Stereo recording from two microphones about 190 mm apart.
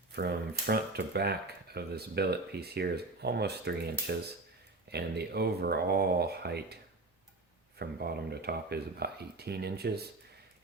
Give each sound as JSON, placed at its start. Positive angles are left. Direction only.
{"t": 0.1, "sound": "speech", "side_deg": -55}
{"t": 7.8, "sound": "speech", "side_deg": -55}